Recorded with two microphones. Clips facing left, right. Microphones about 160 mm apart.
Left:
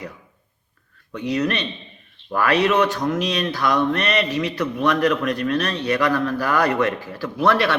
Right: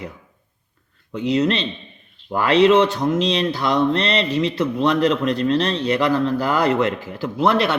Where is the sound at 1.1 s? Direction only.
25° right (ahead or behind).